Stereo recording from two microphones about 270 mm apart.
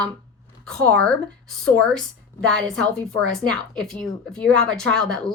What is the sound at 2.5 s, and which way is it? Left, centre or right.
Speech, centre.